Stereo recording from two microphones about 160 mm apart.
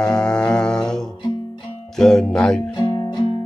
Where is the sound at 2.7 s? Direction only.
25° left (ahead or behind).